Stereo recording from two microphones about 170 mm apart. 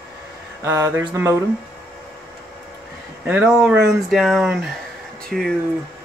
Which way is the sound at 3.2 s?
10° right (ahead or behind).